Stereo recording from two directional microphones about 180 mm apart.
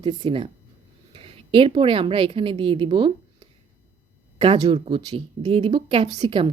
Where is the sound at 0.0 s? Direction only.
25° right (ahead or behind).